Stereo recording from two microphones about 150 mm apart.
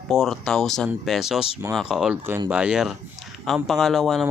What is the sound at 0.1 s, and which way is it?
Speech, 5° left (ahead or behind).